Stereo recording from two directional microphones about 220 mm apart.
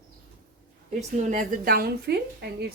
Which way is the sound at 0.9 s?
35° right (ahead or behind).